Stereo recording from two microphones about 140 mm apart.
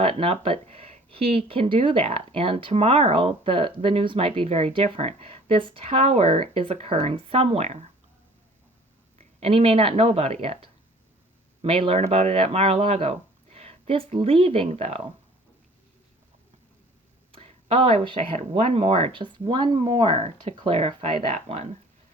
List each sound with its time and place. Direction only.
0.0 s speech: 40° right (ahead or behind)
9.1 s speech: 45° right (ahead or behind)
17.3 s speech: 40° right (ahead or behind)
21.3 s speech: 50° right (ahead or behind)